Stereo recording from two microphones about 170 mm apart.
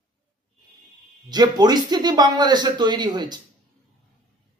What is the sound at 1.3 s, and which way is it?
A man's voice, 25° right (ahead or behind).